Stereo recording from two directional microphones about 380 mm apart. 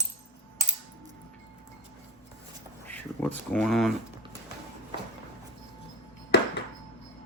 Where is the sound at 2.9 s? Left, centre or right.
Centre.